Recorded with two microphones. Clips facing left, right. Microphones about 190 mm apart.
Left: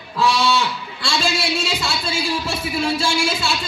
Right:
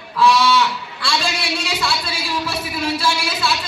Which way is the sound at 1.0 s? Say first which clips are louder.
Left 1 dB; 25° left (ahead or behind).